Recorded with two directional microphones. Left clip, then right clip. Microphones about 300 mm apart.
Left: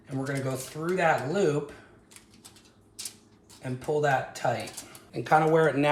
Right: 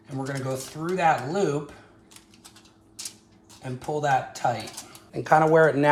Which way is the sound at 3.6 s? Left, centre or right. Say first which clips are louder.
Left 1 dB; centre.